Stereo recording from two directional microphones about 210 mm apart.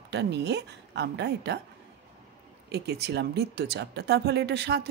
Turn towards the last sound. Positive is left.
turn(degrees=-50)  # may be behind; listen again after turning